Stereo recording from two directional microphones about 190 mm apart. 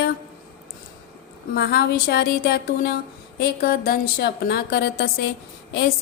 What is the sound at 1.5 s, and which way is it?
Speech, 55° left (ahead or behind).